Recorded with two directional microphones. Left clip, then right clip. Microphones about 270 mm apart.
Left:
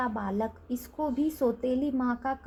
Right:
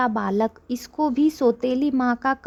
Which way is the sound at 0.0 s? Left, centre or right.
Right.